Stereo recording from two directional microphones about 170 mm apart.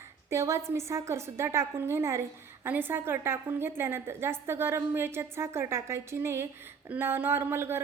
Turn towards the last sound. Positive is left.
turn(degrees=-15)  # may be behind; listen again after turning